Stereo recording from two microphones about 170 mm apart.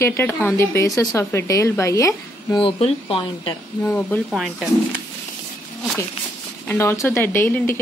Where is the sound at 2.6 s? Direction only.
30° left (ahead or behind).